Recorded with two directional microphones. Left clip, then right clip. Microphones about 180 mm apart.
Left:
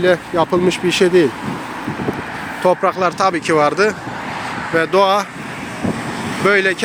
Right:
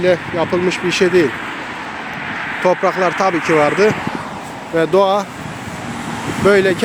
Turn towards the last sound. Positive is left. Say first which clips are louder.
# right 2 dB
turn(degrees=-20)  # may be behind; listen again after turning